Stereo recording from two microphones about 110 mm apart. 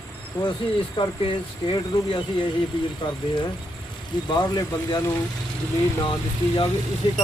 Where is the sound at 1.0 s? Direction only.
50° left (ahead or behind).